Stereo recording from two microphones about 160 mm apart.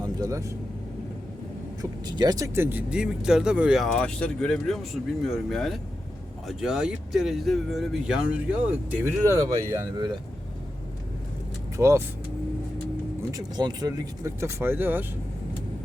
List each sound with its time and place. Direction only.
0.0 s speech: 20° right (ahead or behind)
1.8 s speech: 25° right (ahead or behind)
11.8 s speech: 20° right (ahead or behind)
13.3 s speech: 25° right (ahead or behind)